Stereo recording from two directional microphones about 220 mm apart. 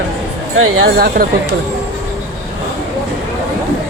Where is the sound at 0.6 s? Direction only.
65° right (ahead or behind).